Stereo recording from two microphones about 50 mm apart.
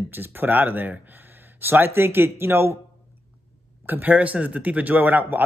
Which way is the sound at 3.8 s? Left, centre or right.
Right.